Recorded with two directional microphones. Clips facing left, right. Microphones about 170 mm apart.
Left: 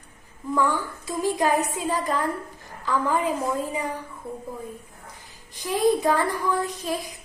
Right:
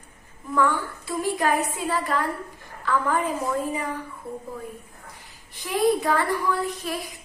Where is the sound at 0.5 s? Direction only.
15° left (ahead or behind).